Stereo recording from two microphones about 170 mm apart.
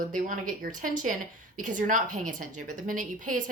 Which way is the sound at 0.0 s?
50° right (ahead or behind).